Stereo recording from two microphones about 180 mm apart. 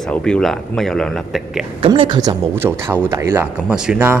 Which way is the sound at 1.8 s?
25° right (ahead or behind).